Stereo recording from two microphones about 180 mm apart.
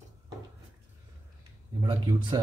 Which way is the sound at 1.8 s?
25° right (ahead or behind).